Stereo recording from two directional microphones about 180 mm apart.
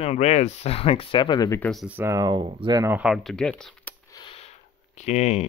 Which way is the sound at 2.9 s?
5° right (ahead or behind).